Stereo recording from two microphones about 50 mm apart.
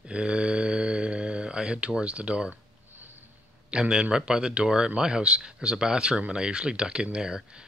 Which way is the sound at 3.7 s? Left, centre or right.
Centre.